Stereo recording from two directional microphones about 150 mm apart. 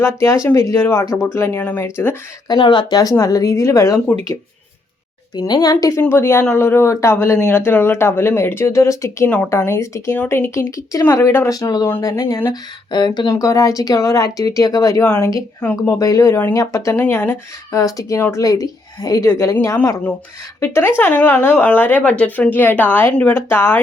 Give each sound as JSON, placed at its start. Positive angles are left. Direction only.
{"t": 0.0, "sound": "speech", "side_deg": 20}
{"t": 2.5, "sound": "speech", "side_deg": 30}
{"t": 5.3, "sound": "speech", "side_deg": 25}